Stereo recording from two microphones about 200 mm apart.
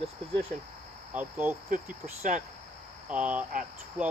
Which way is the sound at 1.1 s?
10° right (ahead or behind).